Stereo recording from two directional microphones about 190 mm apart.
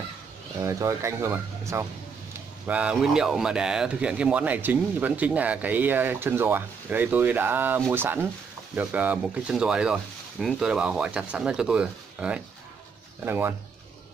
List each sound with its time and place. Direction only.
0.6 s speech: 15° right (ahead or behind)